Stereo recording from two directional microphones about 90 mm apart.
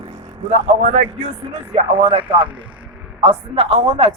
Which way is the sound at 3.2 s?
85° right.